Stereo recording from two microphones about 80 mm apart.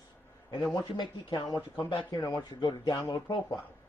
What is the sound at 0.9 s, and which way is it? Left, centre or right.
Speech, left.